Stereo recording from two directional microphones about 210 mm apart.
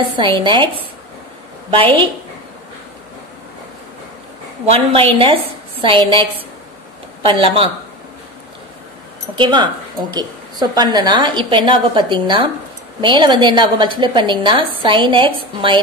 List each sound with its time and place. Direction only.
0.2 s a woman's voice: 25° right (ahead or behind)
1.7 s a woman's voice: 25° right (ahead or behind)
4.6 s a woman's voice: 25° right (ahead or behind)
7.2 s a woman's voice: 25° right (ahead or behind)
9.3 s a woman's voice: 20° right (ahead or behind)